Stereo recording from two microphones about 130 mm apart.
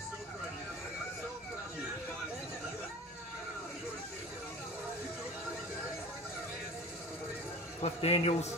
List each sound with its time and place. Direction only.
7.8 s a man's voice: 50° left (ahead or behind)